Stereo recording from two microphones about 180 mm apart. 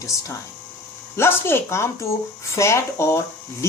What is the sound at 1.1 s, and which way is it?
Speech, 15° left (ahead or behind).